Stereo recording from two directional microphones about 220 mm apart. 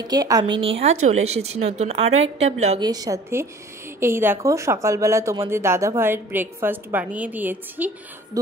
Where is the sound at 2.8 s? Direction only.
15° right (ahead or behind).